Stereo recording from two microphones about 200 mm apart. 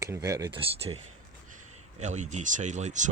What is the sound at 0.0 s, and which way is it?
Speech, 15° right (ahead or behind).